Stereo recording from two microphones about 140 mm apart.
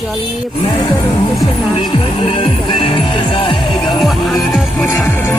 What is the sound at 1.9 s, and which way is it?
Music, 40° left (ahead or behind).